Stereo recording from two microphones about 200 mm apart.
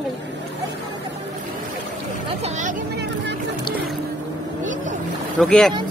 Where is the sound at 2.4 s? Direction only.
40° right (ahead or behind).